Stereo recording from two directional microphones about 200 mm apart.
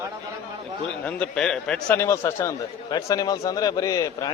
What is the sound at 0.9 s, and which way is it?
A man's voice, 5° left (ahead or behind).